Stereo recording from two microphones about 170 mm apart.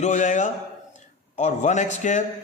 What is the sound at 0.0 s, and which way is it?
A man's voice, 45° left (ahead or behind).